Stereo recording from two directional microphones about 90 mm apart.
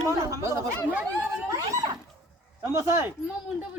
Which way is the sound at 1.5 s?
40° right (ahead or behind).